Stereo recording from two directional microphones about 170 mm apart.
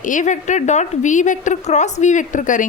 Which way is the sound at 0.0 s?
50° left (ahead or behind).